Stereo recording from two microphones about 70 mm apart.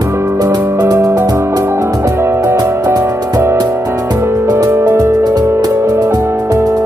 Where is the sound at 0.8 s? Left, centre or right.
Right.